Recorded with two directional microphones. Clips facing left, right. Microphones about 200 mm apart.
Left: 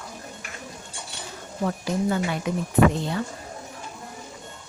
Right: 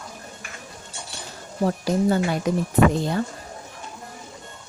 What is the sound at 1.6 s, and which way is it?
Speech, 35° right (ahead or behind).